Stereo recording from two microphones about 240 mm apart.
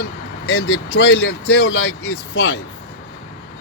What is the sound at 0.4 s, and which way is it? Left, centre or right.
Speech, left.